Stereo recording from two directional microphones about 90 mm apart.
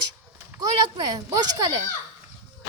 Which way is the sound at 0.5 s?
50° right (ahead or behind).